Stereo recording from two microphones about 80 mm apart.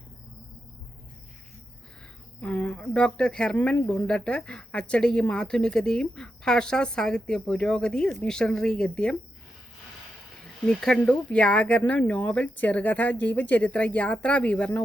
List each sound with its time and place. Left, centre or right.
2.4 s speech: centre
10.7 s speech: centre